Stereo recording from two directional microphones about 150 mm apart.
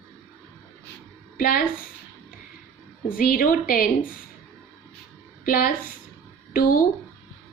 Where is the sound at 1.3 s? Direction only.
65° left (ahead or behind).